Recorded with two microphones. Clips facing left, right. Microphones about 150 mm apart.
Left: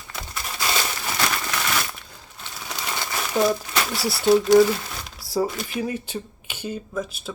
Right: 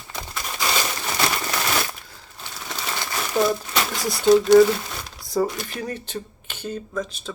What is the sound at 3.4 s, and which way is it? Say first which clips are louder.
Speech: even; 10° left (ahead or behind).